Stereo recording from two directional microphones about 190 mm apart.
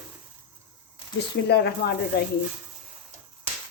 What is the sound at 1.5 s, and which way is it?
Speech, 60° left (ahead or behind).